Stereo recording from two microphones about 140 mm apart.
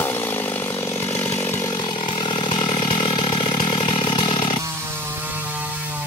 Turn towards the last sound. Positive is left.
turn(degrees=35)  # may be behind; listen again after turning